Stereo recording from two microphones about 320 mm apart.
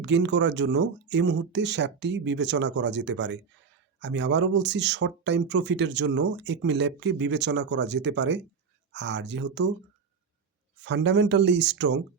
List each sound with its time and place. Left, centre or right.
0.0 s speech: right
10.8 s speech: right